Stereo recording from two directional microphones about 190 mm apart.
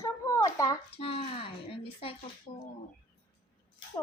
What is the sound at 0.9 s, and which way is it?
Speech, 30° left (ahead or behind).